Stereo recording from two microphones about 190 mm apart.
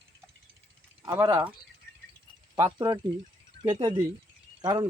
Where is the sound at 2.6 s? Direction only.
20° right (ahead or behind).